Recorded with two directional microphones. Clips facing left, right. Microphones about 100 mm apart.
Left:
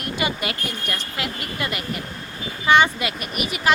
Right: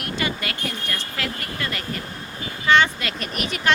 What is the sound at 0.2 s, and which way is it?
A woman's voice, 15° left (ahead or behind).